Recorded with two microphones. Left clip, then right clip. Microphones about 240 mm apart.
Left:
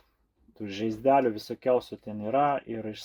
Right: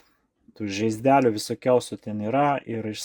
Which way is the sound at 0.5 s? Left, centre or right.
Right.